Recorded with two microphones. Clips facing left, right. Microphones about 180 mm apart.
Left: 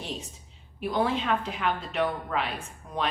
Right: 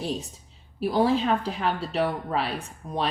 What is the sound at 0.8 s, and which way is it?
A woman's voice, 35° right (ahead or behind).